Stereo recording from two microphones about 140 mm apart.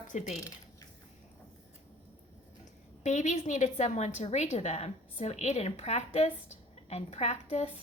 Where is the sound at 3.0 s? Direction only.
60° left (ahead or behind).